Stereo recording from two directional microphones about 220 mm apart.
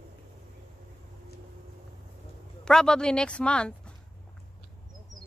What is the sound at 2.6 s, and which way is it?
Speech, 5° left (ahead or behind).